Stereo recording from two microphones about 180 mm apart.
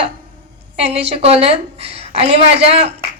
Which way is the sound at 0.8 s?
35° right (ahead or behind).